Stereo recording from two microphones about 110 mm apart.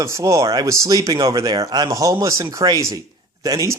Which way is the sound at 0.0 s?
30° right (ahead or behind).